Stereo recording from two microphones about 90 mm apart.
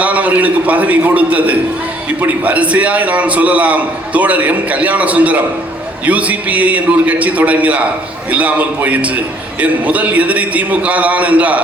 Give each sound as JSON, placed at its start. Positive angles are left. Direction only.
{"t": 0.0, "sound": "a man's voice", "side_deg": -15}